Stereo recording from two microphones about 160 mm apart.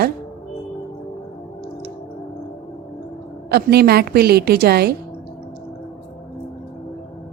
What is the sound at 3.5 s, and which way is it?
A woman's voice, 80° right.